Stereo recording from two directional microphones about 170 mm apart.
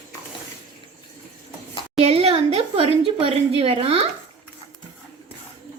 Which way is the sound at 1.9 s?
35° right (ahead or behind).